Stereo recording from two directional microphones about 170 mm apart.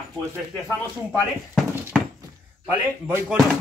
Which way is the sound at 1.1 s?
Centre (ahead or behind).